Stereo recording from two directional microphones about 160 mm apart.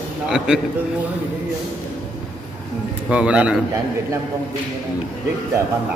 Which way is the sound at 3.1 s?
5° right (ahead or behind).